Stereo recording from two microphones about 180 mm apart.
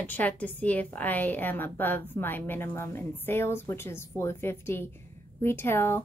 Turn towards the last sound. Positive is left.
turn(degrees=15)  # may be behind; listen again after turning